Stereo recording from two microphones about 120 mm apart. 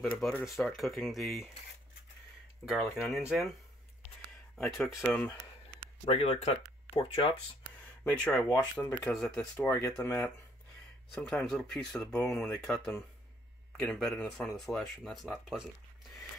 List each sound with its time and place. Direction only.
0.0 s speech: 5° left (ahead or behind)
2.6 s speech: 5° right (ahead or behind)
4.6 s speech: centre (ahead or behind)
5.1 s speech: 10° left (ahead or behind)
6.0 s speech: 50° left (ahead or behind)
8.0 s speech: 10° left (ahead or behind)
9.6 s speech: 25° left (ahead or behind)
11.2 s speech: 5° left (ahead or behind)